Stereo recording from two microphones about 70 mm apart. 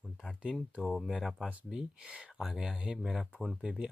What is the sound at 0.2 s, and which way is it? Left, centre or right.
Speech, centre.